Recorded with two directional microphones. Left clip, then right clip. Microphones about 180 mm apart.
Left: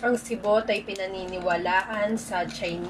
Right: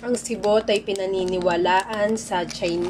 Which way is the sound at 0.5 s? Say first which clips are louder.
Right 4 dB; 15° right (ahead or behind).